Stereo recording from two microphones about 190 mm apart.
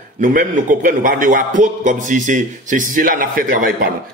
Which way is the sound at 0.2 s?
45° right (ahead or behind).